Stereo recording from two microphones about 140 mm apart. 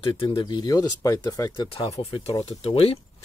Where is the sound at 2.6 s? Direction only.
45° left (ahead or behind).